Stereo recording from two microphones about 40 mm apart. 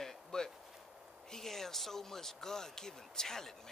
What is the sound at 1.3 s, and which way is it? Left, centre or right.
Speech, centre.